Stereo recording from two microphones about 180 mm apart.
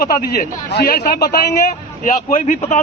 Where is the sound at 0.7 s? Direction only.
60° left (ahead or behind).